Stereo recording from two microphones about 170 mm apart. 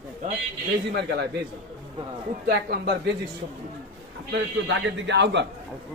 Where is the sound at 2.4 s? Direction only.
70° right (ahead or behind).